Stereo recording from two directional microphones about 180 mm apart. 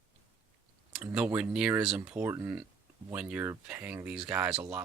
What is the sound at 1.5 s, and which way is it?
Speech, 5° right (ahead or behind).